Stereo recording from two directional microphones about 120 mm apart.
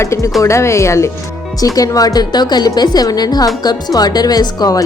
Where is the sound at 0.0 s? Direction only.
25° left (ahead or behind).